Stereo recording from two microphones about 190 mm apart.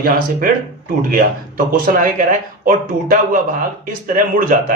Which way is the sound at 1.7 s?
50° right (ahead or behind).